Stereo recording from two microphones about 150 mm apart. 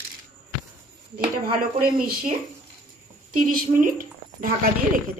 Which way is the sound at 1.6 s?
75° right (ahead or behind).